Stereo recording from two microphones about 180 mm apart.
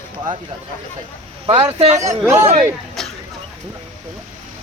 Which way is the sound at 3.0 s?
Centre (ahead or behind).